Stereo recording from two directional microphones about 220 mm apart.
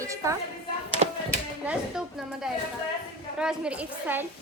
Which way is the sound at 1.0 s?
35° right (ahead or behind).